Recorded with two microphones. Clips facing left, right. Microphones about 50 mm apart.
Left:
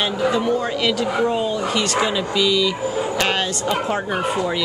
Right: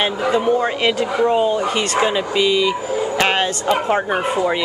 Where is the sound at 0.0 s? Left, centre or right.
Right.